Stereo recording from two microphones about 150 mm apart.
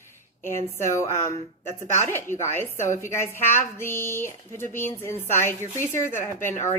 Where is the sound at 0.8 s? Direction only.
20° left (ahead or behind).